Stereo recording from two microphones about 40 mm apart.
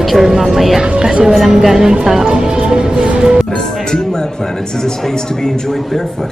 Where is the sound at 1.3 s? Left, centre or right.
Centre.